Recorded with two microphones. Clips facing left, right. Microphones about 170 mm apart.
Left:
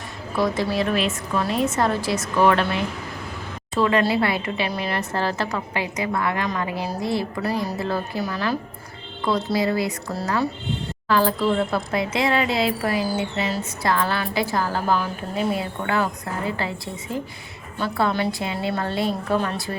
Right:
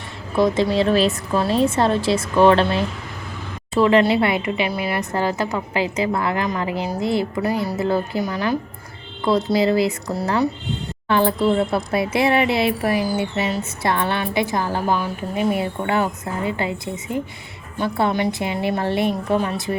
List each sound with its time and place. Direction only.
0.3 s a woman's voice: 25° right (ahead or behind)